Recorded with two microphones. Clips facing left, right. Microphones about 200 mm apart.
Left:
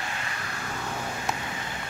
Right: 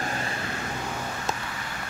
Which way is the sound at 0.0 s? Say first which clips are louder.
Right 5 dB; 40° right (ahead or behind).